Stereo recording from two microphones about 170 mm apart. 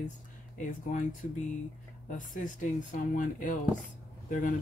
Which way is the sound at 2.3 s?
50° left (ahead or behind).